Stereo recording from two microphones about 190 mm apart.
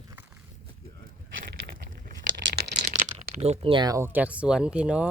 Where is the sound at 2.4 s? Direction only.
55° right (ahead or behind).